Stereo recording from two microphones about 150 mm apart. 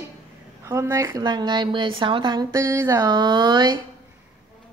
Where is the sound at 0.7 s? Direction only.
20° right (ahead or behind).